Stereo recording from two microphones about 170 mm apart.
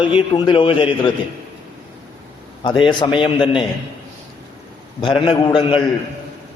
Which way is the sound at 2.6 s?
25° left (ahead or behind).